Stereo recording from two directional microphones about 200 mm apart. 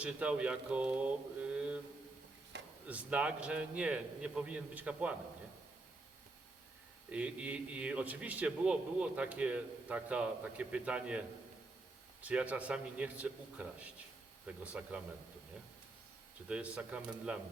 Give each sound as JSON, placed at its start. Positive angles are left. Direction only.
{"t": 0.0, "sound": "a man's voice", "side_deg": -5}
{"t": 2.5, "sound": "a sound", "side_deg": -60}
{"t": 2.9, "sound": "a man's voice", "side_deg": -5}
{"t": 7.1, "sound": "a man's voice", "side_deg": -5}
{"t": 12.2, "sound": "a man's voice", "side_deg": -5}
{"t": 16.5, "sound": "a man's voice", "side_deg": -5}